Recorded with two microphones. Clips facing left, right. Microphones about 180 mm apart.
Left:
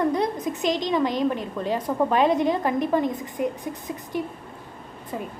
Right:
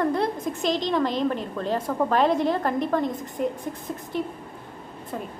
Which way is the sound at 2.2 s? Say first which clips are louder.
Left 1 dB; 15° left (ahead or behind).